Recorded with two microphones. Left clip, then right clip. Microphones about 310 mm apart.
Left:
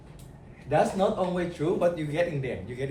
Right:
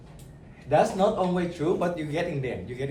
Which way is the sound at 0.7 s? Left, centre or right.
Centre.